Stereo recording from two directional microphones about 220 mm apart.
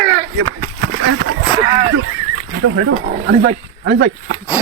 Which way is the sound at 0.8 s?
60° right (ahead or behind).